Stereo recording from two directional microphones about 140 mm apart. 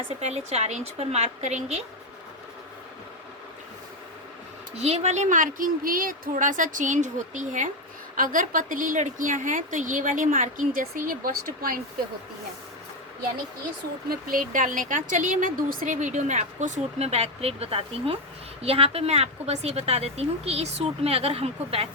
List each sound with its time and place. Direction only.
0.2 s a woman's voice: 50° right (ahead or behind)
4.7 s a woman's voice: 50° right (ahead or behind); by 6.3 s 90° right
6.3 s speech: 65° right (ahead or behind)
8.1 s a woman's voice: 75° right (ahead or behind)
14.1 s a woman's voice: 90° right; by 21.8 s 45° right (ahead or behind)